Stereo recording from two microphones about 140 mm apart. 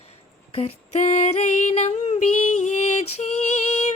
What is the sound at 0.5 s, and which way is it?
Female singing, 50° left (ahead or behind).